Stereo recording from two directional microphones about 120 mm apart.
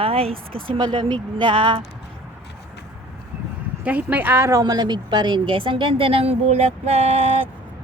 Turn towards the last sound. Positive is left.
turn(degrees=-60)  # may be behind; listen again after turning